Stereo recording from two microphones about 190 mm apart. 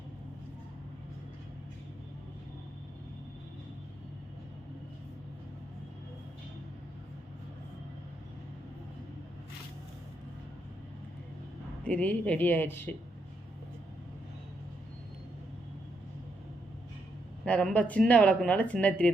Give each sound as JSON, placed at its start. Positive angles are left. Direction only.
{"t": 11.8, "sound": "speech", "side_deg": 5}
{"t": 17.4, "sound": "speech", "side_deg": 5}